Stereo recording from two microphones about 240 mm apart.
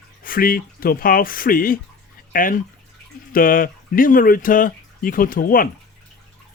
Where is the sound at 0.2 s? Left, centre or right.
Left.